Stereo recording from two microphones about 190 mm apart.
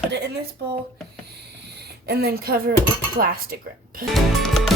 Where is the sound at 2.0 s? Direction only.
55° right (ahead or behind).